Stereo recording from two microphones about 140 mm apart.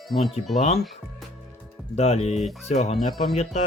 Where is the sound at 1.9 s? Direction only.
50° left (ahead or behind).